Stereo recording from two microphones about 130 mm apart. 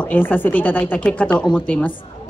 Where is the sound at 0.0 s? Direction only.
10° left (ahead or behind).